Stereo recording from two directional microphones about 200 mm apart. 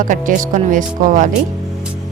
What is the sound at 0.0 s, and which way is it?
Speech, 40° right (ahead or behind).